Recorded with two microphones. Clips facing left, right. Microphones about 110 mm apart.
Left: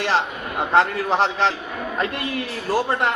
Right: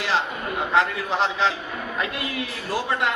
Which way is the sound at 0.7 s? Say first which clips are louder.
Left 4 dB; 50° left (ahead or behind).